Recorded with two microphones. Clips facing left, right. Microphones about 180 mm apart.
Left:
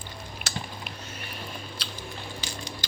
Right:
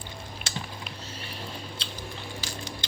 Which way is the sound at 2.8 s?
25° right (ahead or behind).